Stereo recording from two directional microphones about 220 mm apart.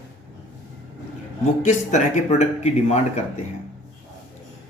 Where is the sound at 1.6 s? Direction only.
35° left (ahead or behind).